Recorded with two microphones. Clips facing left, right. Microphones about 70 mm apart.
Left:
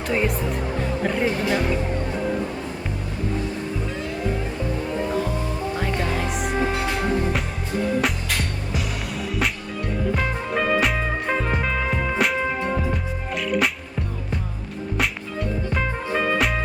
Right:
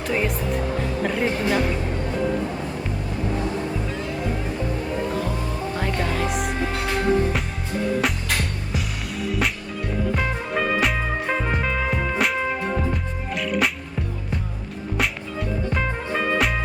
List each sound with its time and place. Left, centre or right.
0.1 s music: centre
6.0 s music: centre
8.0 s music: centre
14.9 s music: centre